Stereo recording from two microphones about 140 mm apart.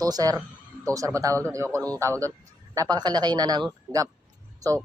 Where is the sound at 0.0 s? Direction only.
25° right (ahead or behind).